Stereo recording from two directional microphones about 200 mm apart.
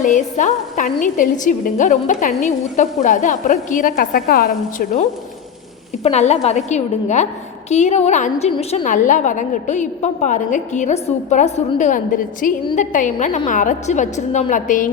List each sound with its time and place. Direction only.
0.0 s a woman's voice: 40° left (ahead or behind)